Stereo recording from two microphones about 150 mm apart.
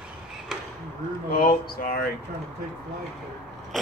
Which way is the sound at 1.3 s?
85° left.